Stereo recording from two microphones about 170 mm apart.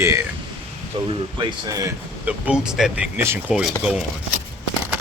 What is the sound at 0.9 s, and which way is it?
Speech, 30° right (ahead or behind).